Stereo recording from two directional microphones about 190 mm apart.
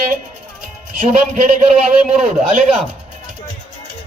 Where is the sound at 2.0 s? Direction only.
40° right (ahead or behind).